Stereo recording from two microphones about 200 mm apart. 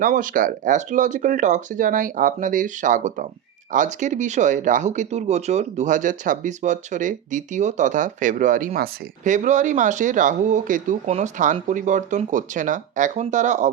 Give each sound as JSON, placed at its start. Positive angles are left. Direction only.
{"t": 0.0, "sound": "speech", "side_deg": -40}